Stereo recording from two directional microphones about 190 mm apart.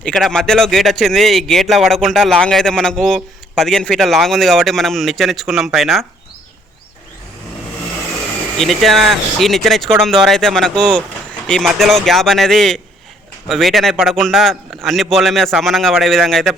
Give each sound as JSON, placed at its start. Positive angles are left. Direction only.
{"t": 0.0, "sound": "a man's voice", "side_deg": 0}
{"t": 8.5, "sound": "a man's voice", "side_deg": 0}